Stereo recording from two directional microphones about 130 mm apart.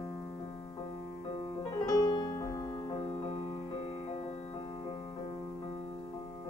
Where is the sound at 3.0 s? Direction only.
50° left (ahead or behind).